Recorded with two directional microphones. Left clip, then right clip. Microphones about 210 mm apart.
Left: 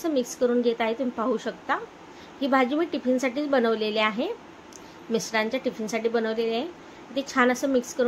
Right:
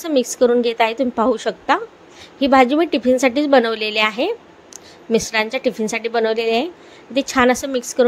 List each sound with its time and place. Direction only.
0.0 s a woman's voice: 40° right (ahead or behind)